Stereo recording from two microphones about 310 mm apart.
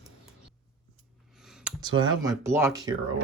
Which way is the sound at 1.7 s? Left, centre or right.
Centre.